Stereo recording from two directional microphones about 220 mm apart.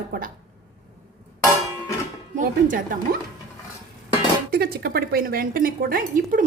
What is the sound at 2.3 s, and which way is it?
Speech, 35° right (ahead or behind).